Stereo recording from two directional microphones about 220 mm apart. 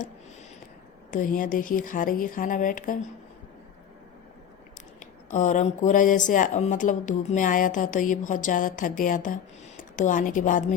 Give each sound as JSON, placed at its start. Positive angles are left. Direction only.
{"t": 1.1, "sound": "speech", "side_deg": 40}
{"t": 4.9, "sound": "speech", "side_deg": 35}